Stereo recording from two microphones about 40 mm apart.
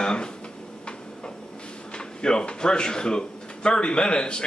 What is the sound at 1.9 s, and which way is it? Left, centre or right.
Speech, left.